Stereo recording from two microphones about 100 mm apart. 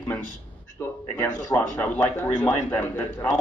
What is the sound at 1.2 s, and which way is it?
A man's voice, 25° left (ahead or behind).